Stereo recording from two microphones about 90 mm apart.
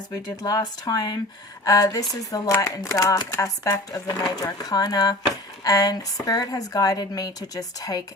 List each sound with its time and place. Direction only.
0.1 s a woman's voice: 45° left (ahead or behind)